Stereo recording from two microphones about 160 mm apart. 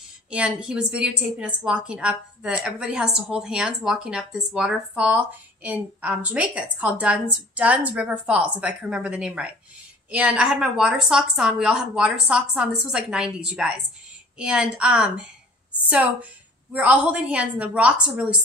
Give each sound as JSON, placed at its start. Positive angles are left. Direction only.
{"t": 0.6, "sound": "a woman's voice", "side_deg": -5}